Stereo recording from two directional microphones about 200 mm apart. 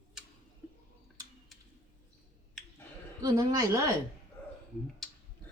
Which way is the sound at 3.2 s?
20° right (ahead or behind).